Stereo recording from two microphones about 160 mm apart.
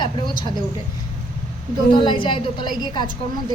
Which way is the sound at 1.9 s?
30° left (ahead or behind).